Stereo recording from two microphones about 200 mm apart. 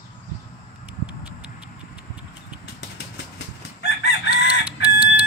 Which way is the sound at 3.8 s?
60° left (ahead or behind).